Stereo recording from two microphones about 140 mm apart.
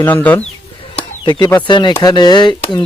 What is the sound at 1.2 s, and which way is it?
Speech, 35° left (ahead or behind).